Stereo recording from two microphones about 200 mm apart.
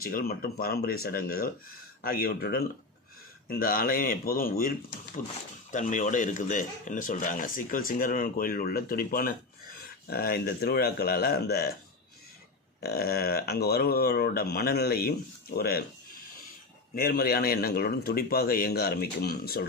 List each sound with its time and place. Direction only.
0.0 s speech: 50° left (ahead or behind)
12.8 s speech: 50° left (ahead or behind)
16.9 s speech: 50° left (ahead or behind)